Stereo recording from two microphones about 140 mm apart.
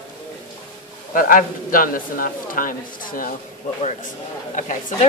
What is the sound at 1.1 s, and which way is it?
A man's voice, 85° left.